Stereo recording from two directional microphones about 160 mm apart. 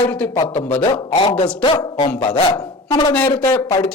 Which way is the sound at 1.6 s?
30° left (ahead or behind).